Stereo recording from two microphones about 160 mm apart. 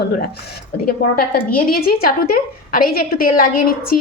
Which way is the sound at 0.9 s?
70° left (ahead or behind).